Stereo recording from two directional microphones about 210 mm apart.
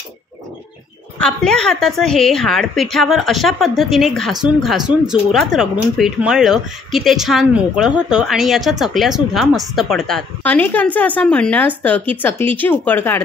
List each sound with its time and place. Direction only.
1.2 s a woman's voice: 5° left (ahead or behind)